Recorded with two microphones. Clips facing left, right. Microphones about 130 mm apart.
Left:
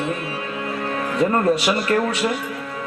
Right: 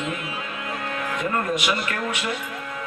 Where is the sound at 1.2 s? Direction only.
35° left (ahead or behind).